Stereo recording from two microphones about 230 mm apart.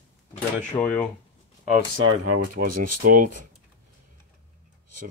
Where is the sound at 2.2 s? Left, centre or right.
Right.